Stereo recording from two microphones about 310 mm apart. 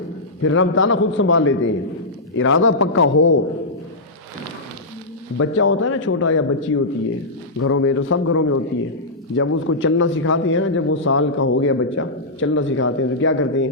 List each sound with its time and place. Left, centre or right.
0.4 s speech: left
5.4 s speech: left